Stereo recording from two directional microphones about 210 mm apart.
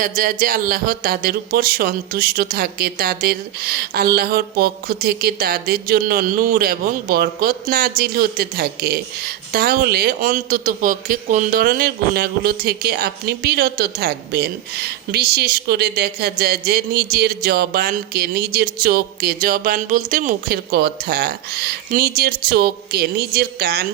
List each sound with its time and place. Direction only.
0.2 s a man's voice: 40° right (ahead or behind)